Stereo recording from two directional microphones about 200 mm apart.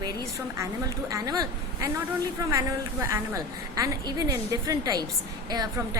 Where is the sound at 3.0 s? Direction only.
15° right (ahead or behind).